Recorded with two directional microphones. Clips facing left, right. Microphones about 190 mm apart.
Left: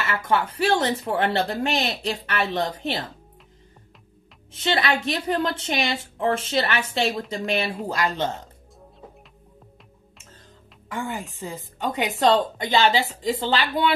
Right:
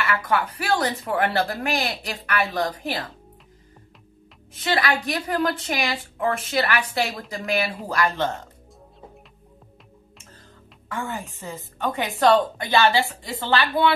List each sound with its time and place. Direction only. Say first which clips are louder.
0.0 s a woman's voice: even; 25° left (ahead or behind)
4.5 s a woman's voice: even; 25° left (ahead or behind)
10.9 s a woman's voice: even; 15° left (ahead or behind)